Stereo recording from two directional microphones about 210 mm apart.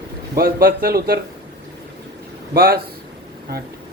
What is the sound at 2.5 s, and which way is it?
Speech, 45° right (ahead or behind).